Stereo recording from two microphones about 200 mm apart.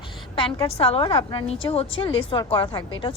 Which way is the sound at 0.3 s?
25° left (ahead or behind).